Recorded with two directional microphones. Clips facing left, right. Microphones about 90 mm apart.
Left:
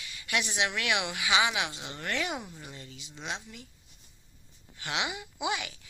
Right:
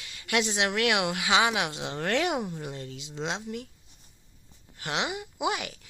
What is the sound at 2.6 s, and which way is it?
Speech, 65° right (ahead or behind).